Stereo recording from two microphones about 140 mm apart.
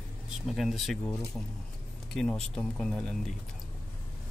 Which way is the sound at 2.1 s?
5° left (ahead or behind).